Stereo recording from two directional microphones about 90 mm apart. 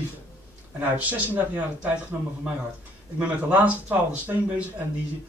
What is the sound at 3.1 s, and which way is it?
Speech, 15° right (ahead or behind).